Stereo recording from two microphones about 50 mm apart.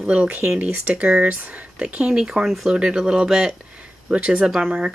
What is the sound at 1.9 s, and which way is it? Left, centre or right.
Speech, right.